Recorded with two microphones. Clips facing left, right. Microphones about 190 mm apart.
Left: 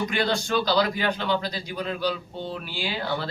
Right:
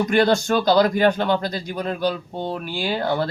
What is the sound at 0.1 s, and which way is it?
A man's voice, 45° right (ahead or behind).